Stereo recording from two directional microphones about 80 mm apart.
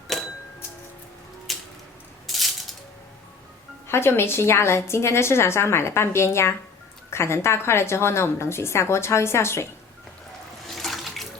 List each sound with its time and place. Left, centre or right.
1.5 s a sound: centre
2.2 s rattle: centre
3.8 s a woman's voice: left
10.8 s water: centre